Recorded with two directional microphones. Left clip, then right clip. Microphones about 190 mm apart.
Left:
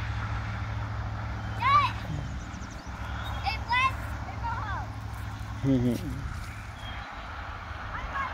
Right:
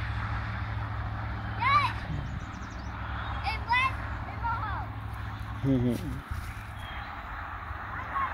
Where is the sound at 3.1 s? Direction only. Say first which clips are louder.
Right 1 dB; 30° left (ahead or behind).